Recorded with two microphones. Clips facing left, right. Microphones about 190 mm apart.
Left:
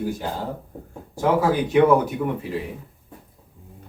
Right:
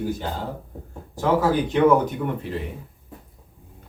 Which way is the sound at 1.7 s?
10° left (ahead or behind).